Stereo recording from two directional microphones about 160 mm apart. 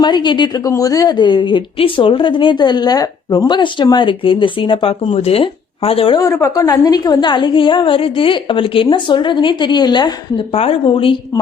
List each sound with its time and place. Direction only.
0.0 s a woman's voice: 25° left (ahead or behind)
6.1 s a woman's voice: 20° left (ahead or behind)